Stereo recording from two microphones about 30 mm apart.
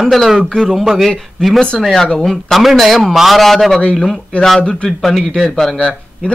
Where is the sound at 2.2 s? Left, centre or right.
Centre.